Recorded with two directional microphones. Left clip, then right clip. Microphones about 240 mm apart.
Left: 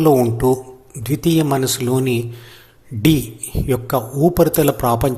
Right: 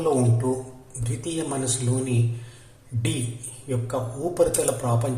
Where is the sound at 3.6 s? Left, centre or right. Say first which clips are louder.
Left 9 dB; left.